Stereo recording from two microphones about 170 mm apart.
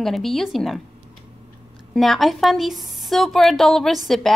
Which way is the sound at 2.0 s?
Centre (ahead or behind).